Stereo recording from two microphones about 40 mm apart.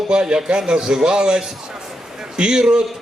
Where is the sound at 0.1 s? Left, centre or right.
Right.